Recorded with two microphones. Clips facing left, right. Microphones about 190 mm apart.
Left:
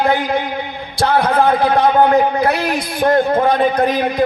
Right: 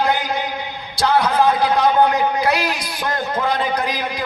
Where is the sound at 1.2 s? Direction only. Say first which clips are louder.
Left 3 dB; 55° left (ahead or behind).